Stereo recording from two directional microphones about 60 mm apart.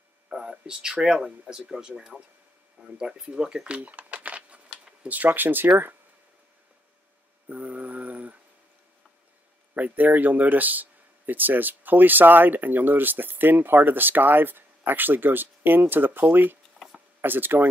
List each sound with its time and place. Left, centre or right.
0.3 s a sound: centre
1.0 s speech: centre; by 5.7 s right
7.4 s mantra: right
9.8 s speech: right
16.8 s a sound: centre
17.2 s speech: right